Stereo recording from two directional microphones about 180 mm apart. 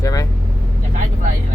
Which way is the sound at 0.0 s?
20° left (ahead or behind).